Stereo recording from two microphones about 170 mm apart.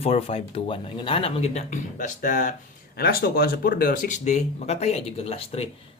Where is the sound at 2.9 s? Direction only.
65° left (ahead or behind).